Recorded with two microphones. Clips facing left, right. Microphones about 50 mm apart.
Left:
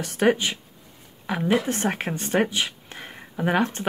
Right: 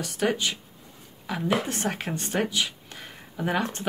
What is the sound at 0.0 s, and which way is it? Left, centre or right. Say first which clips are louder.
Speech: left 4 dB; left.